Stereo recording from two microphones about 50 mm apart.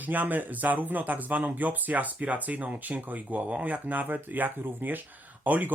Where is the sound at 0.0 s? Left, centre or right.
Right.